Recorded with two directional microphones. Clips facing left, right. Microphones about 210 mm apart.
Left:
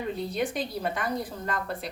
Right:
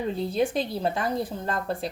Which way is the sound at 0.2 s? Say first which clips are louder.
Right 4 dB; 30° right (ahead or behind).